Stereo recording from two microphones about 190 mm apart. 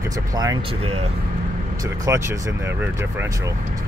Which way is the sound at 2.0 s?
15° right (ahead or behind).